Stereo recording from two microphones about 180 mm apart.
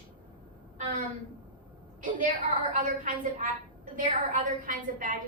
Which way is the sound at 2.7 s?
45° right (ahead or behind).